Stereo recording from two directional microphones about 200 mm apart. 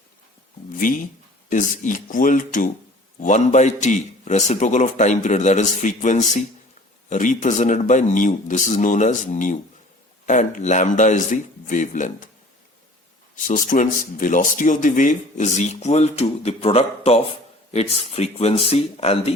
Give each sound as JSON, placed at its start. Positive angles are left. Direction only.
{"t": 0.8, "sound": "speech", "side_deg": 40}
{"t": 13.3, "sound": "speech", "side_deg": 40}